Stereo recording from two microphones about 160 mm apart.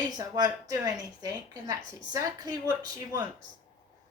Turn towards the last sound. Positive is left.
turn(degrees=-25)  # may be behind; listen again after turning